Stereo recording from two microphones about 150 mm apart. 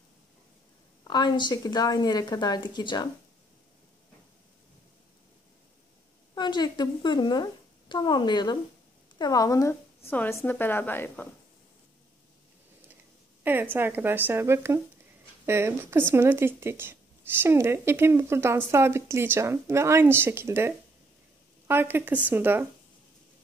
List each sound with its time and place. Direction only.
1.0 s speech: 30° left (ahead or behind)
6.3 s speech: 30° left (ahead or behind); by 11.2 s 15° left (ahead or behind)
13.4 s a sound: 15° right (ahead or behind)
13.7 s speech: 15° right (ahead or behind)